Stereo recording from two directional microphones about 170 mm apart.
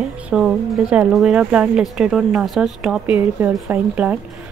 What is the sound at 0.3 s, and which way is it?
A woman's voice, 5° right (ahead or behind).